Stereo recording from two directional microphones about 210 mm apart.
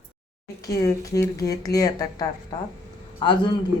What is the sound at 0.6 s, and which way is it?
A woman's voice, 15° left (ahead or behind).